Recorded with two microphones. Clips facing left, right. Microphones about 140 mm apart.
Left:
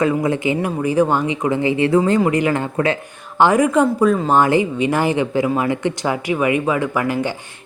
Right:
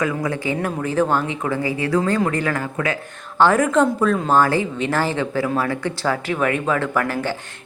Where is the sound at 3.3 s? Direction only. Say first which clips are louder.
Left 2 dB; 15° left (ahead or behind).